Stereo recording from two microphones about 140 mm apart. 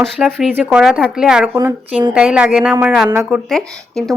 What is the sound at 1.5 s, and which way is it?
Speech, 20° right (ahead or behind).